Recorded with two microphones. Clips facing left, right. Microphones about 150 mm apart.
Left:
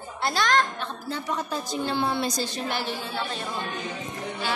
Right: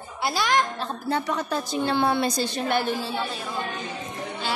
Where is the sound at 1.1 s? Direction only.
70° right (ahead or behind); by 3.0 s 55° right (ahead or behind).